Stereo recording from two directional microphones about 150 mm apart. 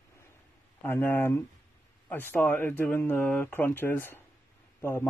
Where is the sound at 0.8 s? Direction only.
15° left (ahead or behind).